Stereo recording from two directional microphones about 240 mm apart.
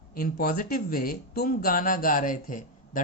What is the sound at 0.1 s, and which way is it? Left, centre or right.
Speech, left.